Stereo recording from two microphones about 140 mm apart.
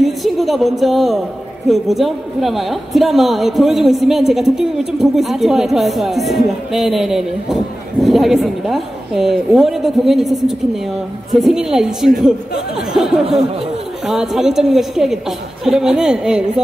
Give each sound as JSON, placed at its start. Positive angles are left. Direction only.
{"t": 0.0, "sound": "a woman's voice", "side_deg": 0}